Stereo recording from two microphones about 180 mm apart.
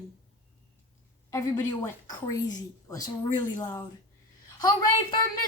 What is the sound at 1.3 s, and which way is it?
Speech, 15° left (ahead or behind).